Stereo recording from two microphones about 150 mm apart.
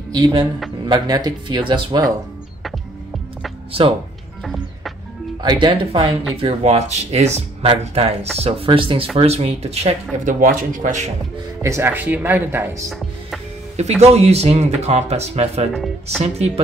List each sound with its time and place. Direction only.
0.1 s speech: 30° right (ahead or behind)
5.4 s speech: 30° right (ahead or behind)
6.4 s speech: 45° right (ahead or behind)
10.1 s speech: 65° right (ahead or behind)
11.6 s speech: 15° right (ahead or behind)
13.7 s speech: 45° right (ahead or behind)
15.7 s speech: centre (ahead or behind)
16.2 s speech: 45° right (ahead or behind)